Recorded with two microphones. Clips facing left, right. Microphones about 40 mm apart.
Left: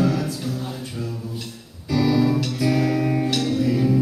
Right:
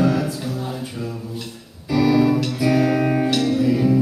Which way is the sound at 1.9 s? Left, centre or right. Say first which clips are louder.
Right 3 dB; centre.